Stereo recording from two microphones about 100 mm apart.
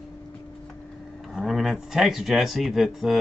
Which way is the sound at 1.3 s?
Centre (ahead or behind).